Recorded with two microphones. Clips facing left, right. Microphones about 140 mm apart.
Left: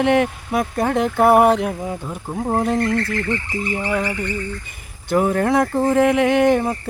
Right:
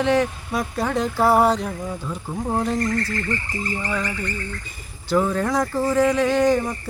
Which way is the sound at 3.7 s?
70° left (ahead or behind).